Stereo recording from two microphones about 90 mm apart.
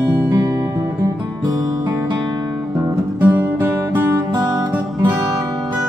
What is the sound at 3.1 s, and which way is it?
Music, 20° right (ahead or behind).